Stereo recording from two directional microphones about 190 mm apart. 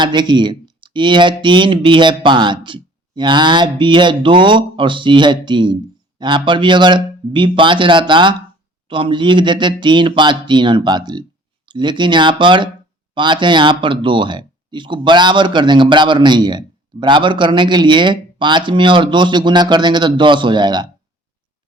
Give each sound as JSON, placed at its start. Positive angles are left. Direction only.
{"t": 0.0, "sound": "speech", "side_deg": -25}